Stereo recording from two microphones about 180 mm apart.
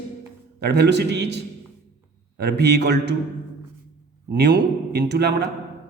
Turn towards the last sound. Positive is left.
turn(degrees=-65)  # may be behind; listen again after turning